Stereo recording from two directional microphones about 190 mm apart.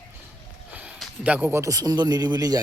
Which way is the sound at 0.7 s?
5° right (ahead or behind).